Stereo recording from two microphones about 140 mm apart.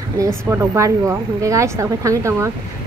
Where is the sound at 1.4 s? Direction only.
20° right (ahead or behind).